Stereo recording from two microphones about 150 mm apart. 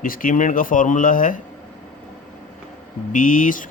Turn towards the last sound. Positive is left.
turn(degrees=60)  # may be behind; listen again after turning